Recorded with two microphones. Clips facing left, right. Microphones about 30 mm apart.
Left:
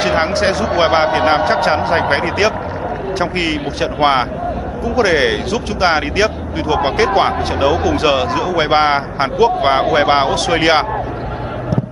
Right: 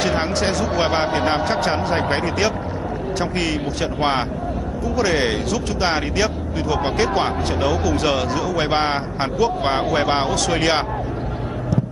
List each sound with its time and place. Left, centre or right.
0.0 s speech: left